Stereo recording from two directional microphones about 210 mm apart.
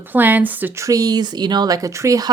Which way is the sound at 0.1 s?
10° right (ahead or behind).